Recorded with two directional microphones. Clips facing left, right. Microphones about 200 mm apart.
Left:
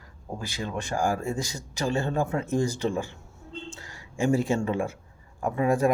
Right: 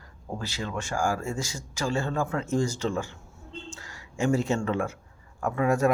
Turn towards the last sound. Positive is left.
turn(degrees=25)  # may be behind; listen again after turning